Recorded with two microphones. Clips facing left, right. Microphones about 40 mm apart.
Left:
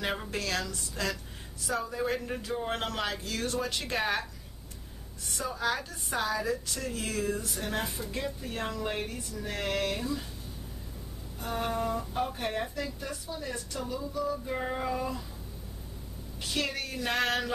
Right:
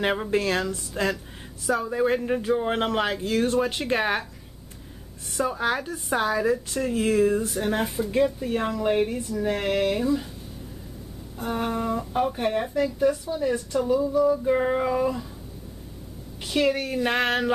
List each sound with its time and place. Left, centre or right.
0.0 s a woman's voice: right
5.4 s a woman's voice: right
7.5 s a woman's voice: centre
11.4 s a woman's voice: centre
16.4 s a woman's voice: centre